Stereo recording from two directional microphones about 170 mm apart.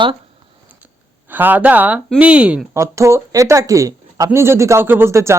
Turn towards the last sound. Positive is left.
turn(degrees=-15)  # may be behind; listen again after turning